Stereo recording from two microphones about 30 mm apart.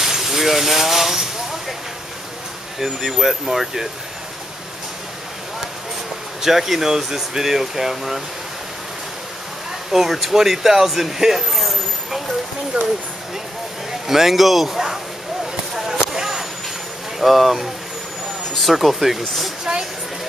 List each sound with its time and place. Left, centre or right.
0.0 s speech: centre
2.8 s speech: centre
6.4 s speech: centre
9.8 s speech: centre
11.5 s vehicle: centre
12.7 s speech: right
14.0 s speech: centre
15.4 s a sound: centre
17.2 s speech: centre
19.6 s a sound: right